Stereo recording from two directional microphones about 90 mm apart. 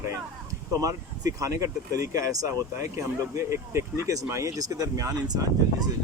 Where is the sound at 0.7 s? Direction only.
40° right (ahead or behind).